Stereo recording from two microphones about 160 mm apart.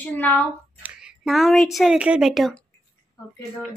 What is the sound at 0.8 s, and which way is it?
A woman's voice, centre (ahead or behind).